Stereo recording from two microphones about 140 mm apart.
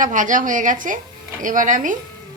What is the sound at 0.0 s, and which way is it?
A woman's voice, 65° right (ahead or behind).